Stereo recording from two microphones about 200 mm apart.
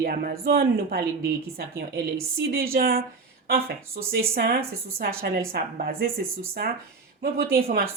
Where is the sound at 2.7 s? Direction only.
50° right (ahead or behind).